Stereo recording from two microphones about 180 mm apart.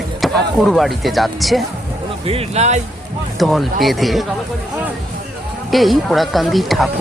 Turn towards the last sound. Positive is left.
turn(degrees=0)  # may be behind; listen again after turning